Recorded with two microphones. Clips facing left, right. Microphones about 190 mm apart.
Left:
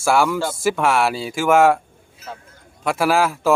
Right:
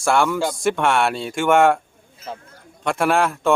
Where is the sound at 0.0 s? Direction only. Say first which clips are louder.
Left 1 dB; 5° left (ahead or behind).